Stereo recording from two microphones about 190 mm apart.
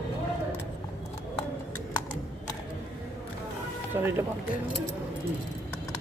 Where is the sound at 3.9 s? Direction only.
10° right (ahead or behind).